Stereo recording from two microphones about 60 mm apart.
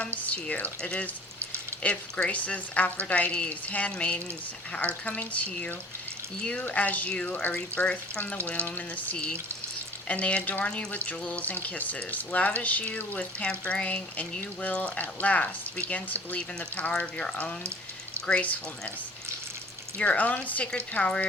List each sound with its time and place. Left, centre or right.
0.0 s speech: left
9.1 s speech: left
20.0 s speech: left